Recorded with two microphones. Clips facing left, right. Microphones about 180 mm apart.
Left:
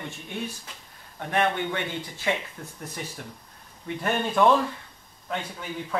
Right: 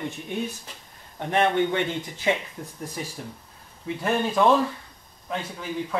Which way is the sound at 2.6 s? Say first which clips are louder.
Right 3 dB; 15° right (ahead or behind).